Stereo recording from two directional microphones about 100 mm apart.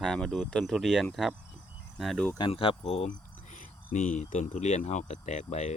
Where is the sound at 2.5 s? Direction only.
65° left (ahead or behind).